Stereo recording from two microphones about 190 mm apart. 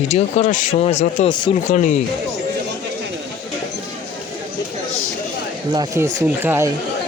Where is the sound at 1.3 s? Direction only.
25° left (ahead or behind).